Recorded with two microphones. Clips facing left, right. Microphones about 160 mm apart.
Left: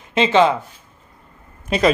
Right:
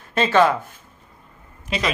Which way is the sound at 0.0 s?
20° left (ahead or behind).